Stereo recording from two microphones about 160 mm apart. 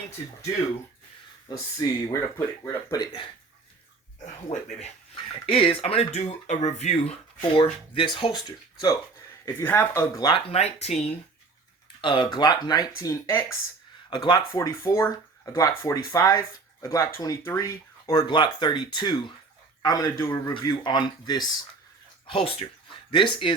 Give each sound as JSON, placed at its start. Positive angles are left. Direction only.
{"t": 1.5, "sound": "speech", "side_deg": 25}
{"t": 4.4, "sound": "speech", "side_deg": 35}
{"t": 9.5, "sound": "speech", "side_deg": 15}
{"t": 10.5, "sound": "speech", "side_deg": 40}
{"t": 12.0, "sound": "speech", "side_deg": 30}
{"t": 14.1, "sound": "speech", "side_deg": 25}
{"t": 20.8, "sound": "speech", "side_deg": 30}